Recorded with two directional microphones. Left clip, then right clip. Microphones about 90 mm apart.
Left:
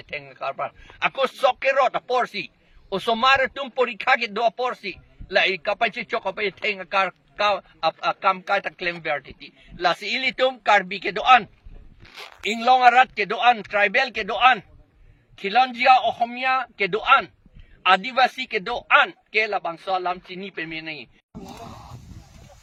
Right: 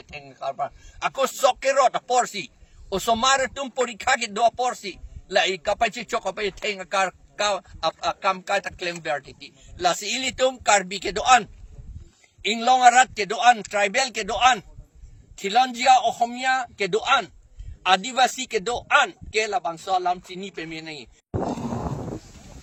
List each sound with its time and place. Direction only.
0.5 s speech: 25° right (ahead or behind)
12.4 s speech: 15° right (ahead or behind)
12.6 s speech: 30° right (ahead or behind)